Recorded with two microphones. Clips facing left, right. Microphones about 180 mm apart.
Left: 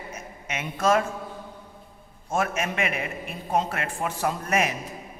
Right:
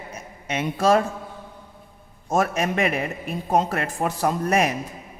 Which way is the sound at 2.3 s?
40° right (ahead or behind).